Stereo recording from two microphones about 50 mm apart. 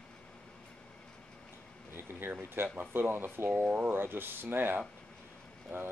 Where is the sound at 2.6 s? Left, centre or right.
Right.